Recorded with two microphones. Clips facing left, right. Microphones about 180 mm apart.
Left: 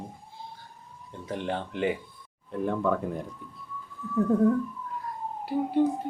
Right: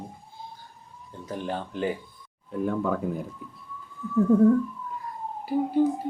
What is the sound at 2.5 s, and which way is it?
Speech, 5° right (ahead or behind).